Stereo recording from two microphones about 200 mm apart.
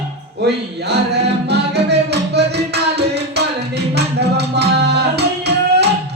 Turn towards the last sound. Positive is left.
turn(degrees=-55)  # may be behind; listen again after turning